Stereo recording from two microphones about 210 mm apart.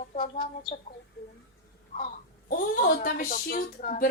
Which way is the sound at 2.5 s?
40° left (ahead or behind).